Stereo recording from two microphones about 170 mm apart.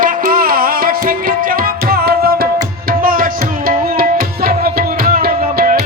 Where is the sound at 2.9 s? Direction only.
55° right (ahead or behind).